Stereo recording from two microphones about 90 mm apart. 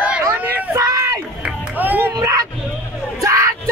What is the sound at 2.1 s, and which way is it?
Speech, 40° right (ahead or behind).